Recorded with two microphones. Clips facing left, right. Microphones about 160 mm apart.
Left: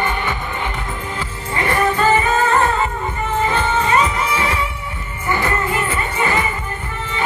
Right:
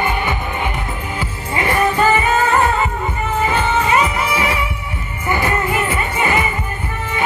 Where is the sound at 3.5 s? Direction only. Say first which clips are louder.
Right 2 dB; 10° right (ahead or behind).